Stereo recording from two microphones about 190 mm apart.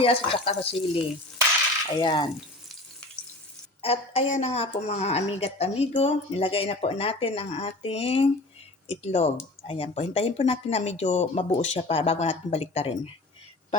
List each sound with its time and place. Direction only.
0.0 s stir: 30° left (ahead or behind)
2.0 s stir: 25° left (ahead or behind)
3.8 s speech: 30° left (ahead or behind)